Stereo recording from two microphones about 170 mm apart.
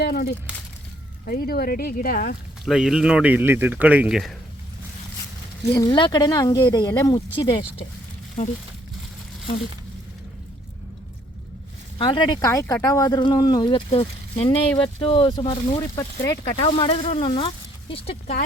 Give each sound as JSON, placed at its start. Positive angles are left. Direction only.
{"t": 0.0, "sound": "speech", "side_deg": 70}
{"t": 2.6, "sound": "speech", "side_deg": -5}
{"t": 5.6, "sound": "speech", "side_deg": 20}
{"t": 11.9, "sound": "speech", "side_deg": 30}